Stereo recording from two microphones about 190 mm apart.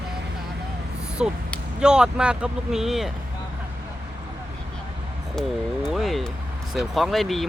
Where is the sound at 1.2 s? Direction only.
5° right (ahead or behind).